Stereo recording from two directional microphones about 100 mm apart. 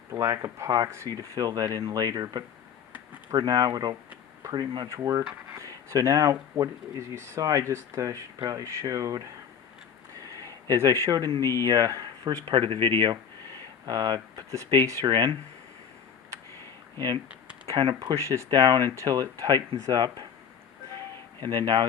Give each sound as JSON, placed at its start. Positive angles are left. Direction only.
{"t": 0.1, "sound": "speech", "side_deg": -35}
{"t": 4.9, "sound": "speech", "side_deg": -35}
{"t": 10.2, "sound": "a sound", "side_deg": -35}
{"t": 11.6, "sound": "speech", "side_deg": -40}
{"t": 12.5, "sound": "speech", "side_deg": -55}
{"t": 13.8, "sound": "speech", "side_deg": -45}
{"t": 17.7, "sound": "speech", "side_deg": -45}
{"t": 18.1, "sound": "speech", "side_deg": -30}
{"t": 21.4, "sound": "speech", "side_deg": -45}